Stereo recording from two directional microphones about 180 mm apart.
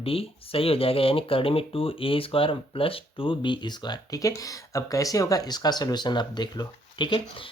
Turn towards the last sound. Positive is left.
turn(degrees=25)  # may be behind; listen again after turning